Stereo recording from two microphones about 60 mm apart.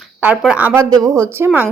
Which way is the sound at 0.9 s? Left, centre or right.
Right.